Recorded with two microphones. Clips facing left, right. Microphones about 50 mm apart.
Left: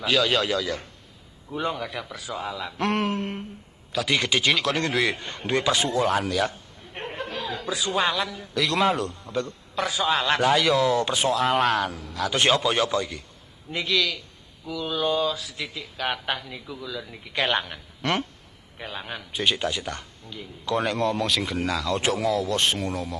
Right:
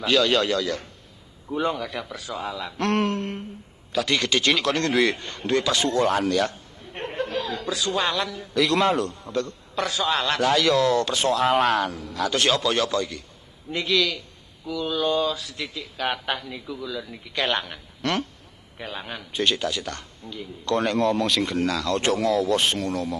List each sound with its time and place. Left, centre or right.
0.0 s a man's voice: centre
5.3 s a man's voice: centre
5.9 s a man's voice: centre
12.4 s a man's voice: left
13.7 s a man's voice: centre
18.8 s a man's voice: centre